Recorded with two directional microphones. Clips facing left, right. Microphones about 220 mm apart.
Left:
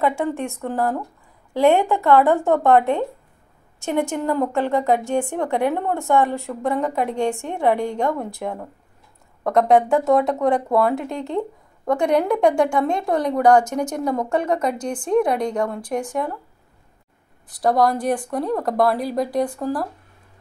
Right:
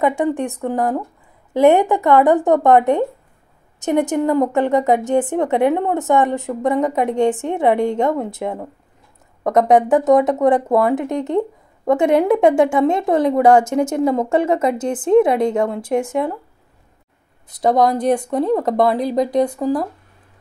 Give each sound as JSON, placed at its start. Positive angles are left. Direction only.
{"t": 0.0, "sound": "a woman's voice", "side_deg": -15}
{"t": 17.5, "sound": "a woman's voice", "side_deg": -20}